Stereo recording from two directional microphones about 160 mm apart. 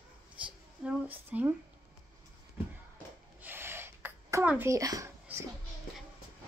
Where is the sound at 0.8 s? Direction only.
10° right (ahead or behind).